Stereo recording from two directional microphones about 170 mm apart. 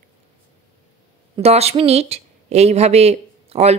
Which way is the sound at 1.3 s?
35° right (ahead or behind).